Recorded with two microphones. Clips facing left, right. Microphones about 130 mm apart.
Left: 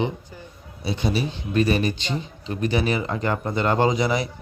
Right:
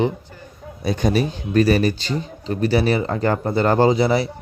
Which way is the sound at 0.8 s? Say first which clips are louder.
Right 5 dB; 45° right (ahead or behind).